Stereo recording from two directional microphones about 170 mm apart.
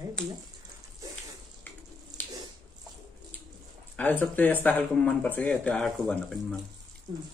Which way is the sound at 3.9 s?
10° left (ahead or behind).